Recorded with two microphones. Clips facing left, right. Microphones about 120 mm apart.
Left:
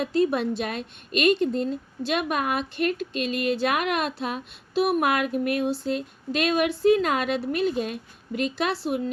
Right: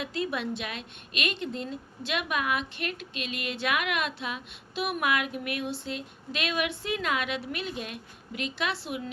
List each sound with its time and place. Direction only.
0.0 s a woman's voice: 40° left (ahead or behind)